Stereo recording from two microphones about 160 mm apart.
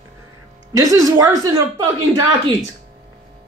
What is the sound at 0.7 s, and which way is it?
Speech, 20° right (ahead or behind).